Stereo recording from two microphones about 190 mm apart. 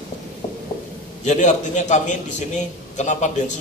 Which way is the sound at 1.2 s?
40° left (ahead or behind).